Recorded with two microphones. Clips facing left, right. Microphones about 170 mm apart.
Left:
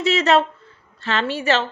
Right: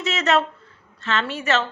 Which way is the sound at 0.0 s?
30° left (ahead or behind).